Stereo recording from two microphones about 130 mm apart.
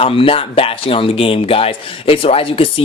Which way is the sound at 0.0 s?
45° left (ahead or behind).